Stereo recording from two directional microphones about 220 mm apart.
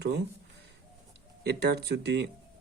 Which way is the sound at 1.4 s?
50° right (ahead or behind).